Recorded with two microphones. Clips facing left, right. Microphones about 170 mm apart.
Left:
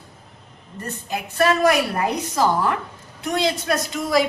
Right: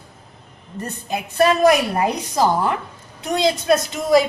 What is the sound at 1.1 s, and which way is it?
A woman's voice, 20° right (ahead or behind).